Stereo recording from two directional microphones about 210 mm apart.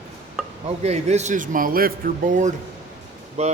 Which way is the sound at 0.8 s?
30° right (ahead or behind).